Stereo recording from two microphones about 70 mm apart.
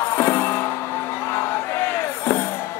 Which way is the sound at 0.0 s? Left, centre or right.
Left.